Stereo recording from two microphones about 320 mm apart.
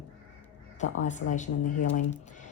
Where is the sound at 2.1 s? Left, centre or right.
Left.